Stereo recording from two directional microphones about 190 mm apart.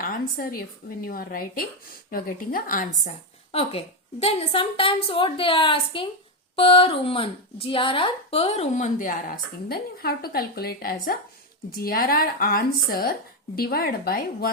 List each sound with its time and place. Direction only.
0.0 s a woman's voice: 50° left (ahead or behind)
3.5 s a woman's voice: 30° left (ahead or behind); by 14.5 s 55° left (ahead or behind)